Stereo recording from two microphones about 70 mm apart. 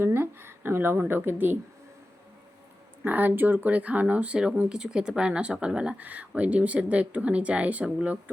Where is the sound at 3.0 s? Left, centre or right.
Right.